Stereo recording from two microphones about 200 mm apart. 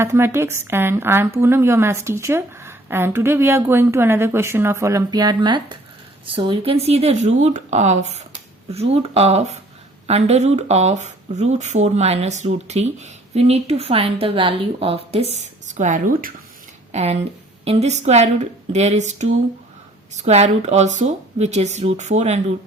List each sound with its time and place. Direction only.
0.0 s a woman's voice: 15° right (ahead or behind); by 22.5 s 35° right (ahead or behind)